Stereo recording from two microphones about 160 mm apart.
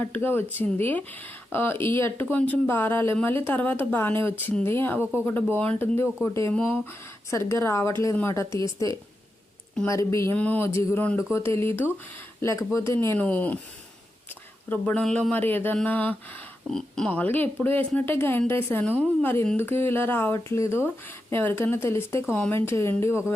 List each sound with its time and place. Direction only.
0.0 s a woman's voice: 10° left (ahead or behind)
10.1 s speech: 20° left (ahead or behind)
14.7 s speech: 10° left (ahead or behind)